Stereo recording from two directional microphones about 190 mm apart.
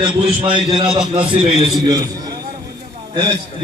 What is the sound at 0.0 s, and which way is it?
A man's voice, 25° right (ahead or behind).